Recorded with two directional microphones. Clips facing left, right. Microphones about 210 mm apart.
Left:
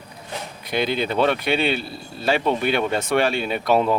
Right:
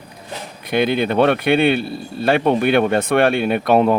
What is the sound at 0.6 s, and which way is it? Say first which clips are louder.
Speech: right 6 dB; 55° right (ahead or behind).